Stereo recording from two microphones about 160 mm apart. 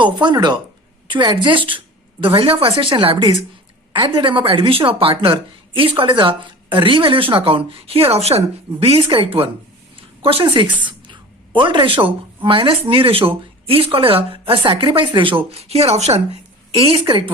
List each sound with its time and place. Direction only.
0.0 s a woman's voice: 30° right (ahead or behind)